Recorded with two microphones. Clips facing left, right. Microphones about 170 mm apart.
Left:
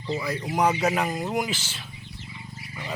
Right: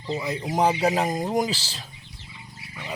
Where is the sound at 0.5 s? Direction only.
30° right (ahead or behind).